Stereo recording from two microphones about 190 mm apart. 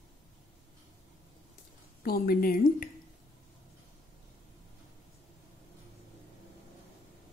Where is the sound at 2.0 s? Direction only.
50° left (ahead or behind).